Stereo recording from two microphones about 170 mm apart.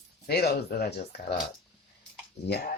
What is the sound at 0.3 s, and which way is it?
Speech, 70° left (ahead or behind).